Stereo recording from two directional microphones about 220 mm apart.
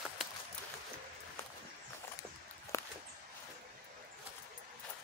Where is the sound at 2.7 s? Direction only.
15° left (ahead or behind).